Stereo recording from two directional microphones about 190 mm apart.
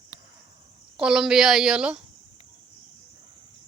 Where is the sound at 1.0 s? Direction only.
5° right (ahead or behind).